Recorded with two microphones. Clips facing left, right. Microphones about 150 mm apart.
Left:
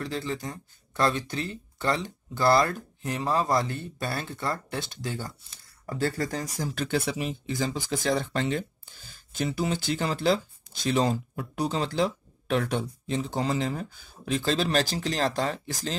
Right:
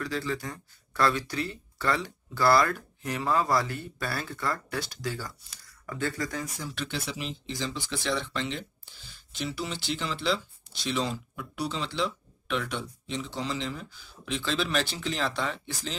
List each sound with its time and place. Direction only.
0.0 s speech: 25° left (ahead or behind); by 16.0 s 40° left (ahead or behind)